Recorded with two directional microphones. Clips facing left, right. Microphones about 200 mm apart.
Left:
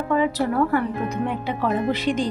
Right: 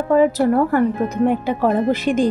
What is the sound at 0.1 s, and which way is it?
Speech, 45° right (ahead or behind).